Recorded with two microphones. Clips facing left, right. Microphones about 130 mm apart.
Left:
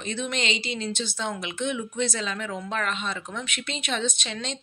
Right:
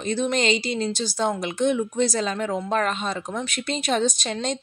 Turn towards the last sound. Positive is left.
turn(degrees=-40)  # may be behind; listen again after turning